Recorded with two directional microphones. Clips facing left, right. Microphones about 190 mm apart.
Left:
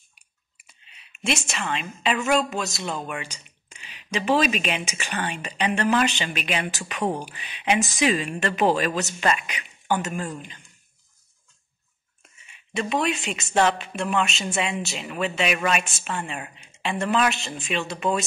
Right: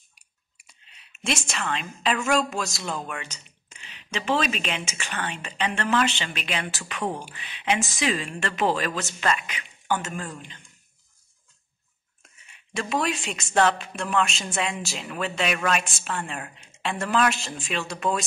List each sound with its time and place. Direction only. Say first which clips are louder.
0.8 s a woman's voice: left 2 dB; centre (ahead or behind)
12.2 s a woman's voice: left 1 dB; centre (ahead or behind)